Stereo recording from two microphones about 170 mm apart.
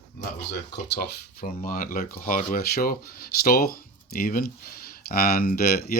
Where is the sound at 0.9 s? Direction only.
60° left (ahead or behind).